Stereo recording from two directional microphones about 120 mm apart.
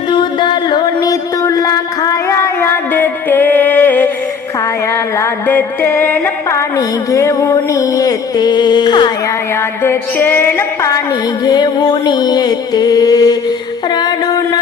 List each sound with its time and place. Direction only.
0.1 s mantra: 40° left (ahead or behind); by 4.1 s 15° left (ahead or behind)
5.1 s music: 20° left (ahead or behind); by 9.1 s 35° left (ahead or behind)
9.8 s music: 20° left (ahead or behind)
11.4 s music: 35° left (ahead or behind)
13.9 s a sound: 35° left (ahead or behind)